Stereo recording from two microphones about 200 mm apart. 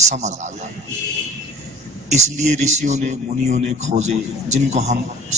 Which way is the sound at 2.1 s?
35° right (ahead or behind).